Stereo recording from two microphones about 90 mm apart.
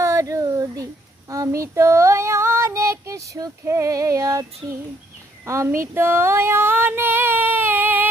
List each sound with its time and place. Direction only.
0.0 s a sound: 35° right (ahead or behind)
1.3 s child singing: 35° right (ahead or behind)
5.5 s female singing: 30° right (ahead or behind)